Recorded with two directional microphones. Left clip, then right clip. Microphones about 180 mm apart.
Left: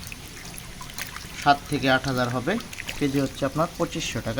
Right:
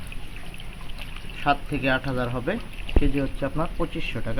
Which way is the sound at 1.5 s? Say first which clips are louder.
Left 3 dB; 20° left (ahead or behind).